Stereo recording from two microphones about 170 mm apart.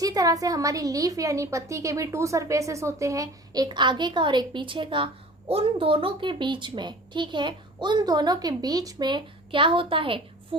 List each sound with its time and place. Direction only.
0.0 s a woman's voice: 20° right (ahead or behind)